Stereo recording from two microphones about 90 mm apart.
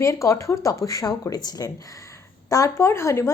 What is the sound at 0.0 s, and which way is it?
A woman's voice, 35° left (ahead or behind).